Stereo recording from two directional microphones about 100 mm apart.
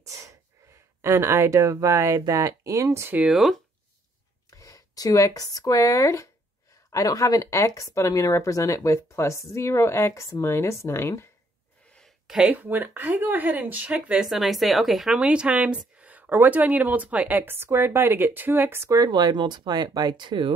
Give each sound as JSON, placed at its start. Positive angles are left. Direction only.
{"t": 1.0, "sound": "speech", "side_deg": -30}
{"t": 3.3, "sound": "a woman's voice", "side_deg": 0}
{"t": 4.5, "sound": "speech", "side_deg": 35}
{"t": 12.3, "sound": "a woman's voice", "side_deg": -5}
{"t": 12.5, "sound": "speech", "side_deg": -20}
{"t": 14.2, "sound": "a woman's voice", "side_deg": 0}